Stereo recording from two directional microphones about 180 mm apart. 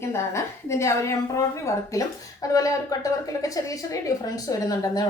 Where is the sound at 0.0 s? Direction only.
15° left (ahead or behind).